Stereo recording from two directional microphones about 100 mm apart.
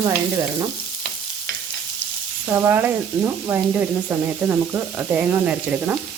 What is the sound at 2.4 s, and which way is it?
Speech, 20° right (ahead or behind).